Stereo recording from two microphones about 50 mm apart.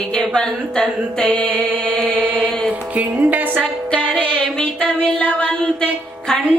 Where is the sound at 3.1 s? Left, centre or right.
Right.